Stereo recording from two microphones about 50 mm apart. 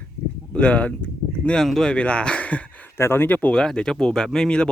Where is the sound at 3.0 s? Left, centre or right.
Left.